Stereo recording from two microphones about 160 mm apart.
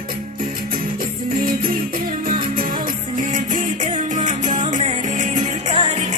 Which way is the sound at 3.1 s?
55° right (ahead or behind).